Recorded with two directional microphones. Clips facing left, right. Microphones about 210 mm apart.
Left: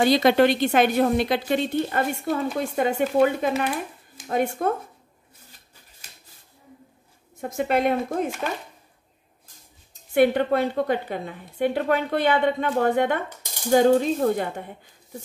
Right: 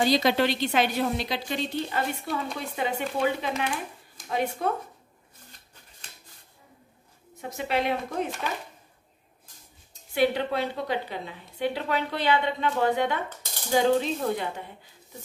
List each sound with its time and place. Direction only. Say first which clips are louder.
0.0 s a woman's voice: left 5 dB; 55° left (ahead or behind)
7.3 s a woman's voice: left 5 dB; 50° left (ahead or behind)
10.1 s a woman's voice: left 6 dB; 50° left (ahead or behind)